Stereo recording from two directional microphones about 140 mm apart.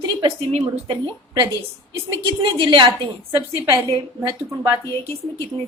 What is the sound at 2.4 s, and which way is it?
Speech, 35° right (ahead or behind).